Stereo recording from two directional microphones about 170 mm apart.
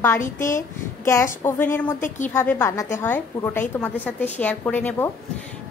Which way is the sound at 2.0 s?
45° left (ahead or behind).